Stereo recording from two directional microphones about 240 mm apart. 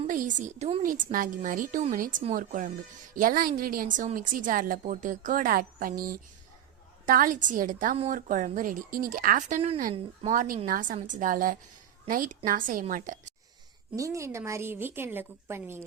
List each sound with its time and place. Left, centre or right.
0.1 s a woman's voice: right
7.0 s a woman's voice: right
13.9 s a woman's voice: centre